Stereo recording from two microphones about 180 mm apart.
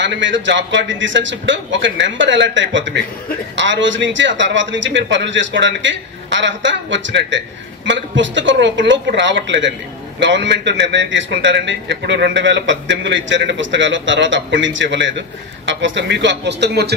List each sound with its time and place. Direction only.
0.0 s a man's voice: 90° right; by 16.9 s 65° right (ahead or behind)